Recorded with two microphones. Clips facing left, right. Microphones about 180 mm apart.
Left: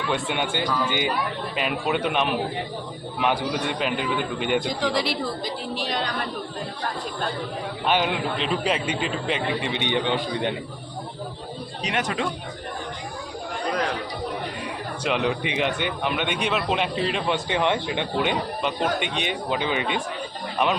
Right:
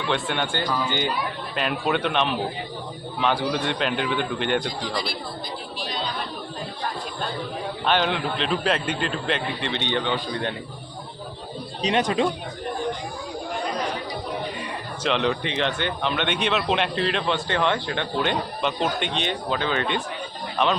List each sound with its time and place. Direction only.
0.1 s speech: 10° left (ahead or behind)
7.9 s speech: 10° left (ahead or behind)
11.9 s speech: 20° right (ahead or behind)
14.6 s speech: 5° left (ahead or behind)